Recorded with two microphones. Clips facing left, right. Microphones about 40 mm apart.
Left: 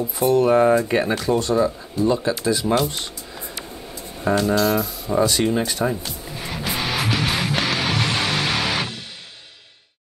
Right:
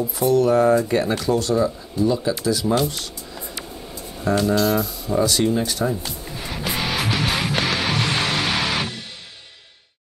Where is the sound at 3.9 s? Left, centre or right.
Centre.